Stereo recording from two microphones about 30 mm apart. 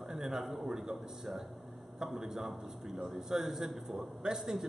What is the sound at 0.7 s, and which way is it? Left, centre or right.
A man's voice, centre.